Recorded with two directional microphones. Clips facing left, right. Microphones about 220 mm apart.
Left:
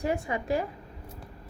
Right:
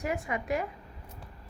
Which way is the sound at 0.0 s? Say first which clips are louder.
Left 3 dB; 30° left (ahead or behind).